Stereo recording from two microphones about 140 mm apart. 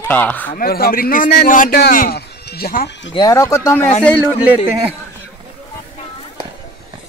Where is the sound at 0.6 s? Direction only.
90° left.